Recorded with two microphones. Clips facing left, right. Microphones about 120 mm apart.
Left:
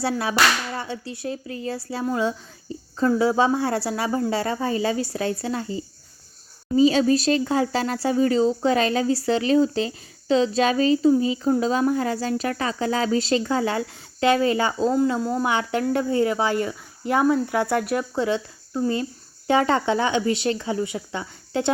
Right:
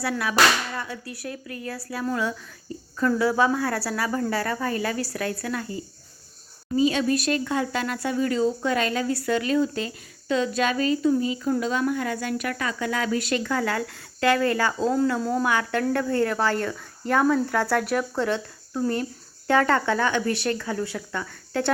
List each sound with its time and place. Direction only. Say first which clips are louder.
0.0 s speech: even; 30° left (ahead or behind)
15.2 s speech: even; 5° left (ahead or behind)
15.4 s speech: left 1 dB; 20° left (ahead or behind)